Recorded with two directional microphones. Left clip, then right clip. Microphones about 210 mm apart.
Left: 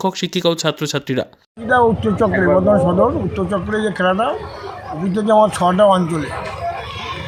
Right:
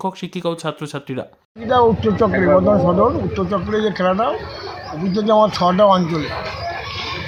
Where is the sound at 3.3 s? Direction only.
Centre (ahead or behind).